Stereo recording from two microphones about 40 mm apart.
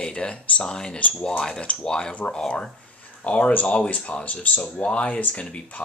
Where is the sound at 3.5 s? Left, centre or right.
Left.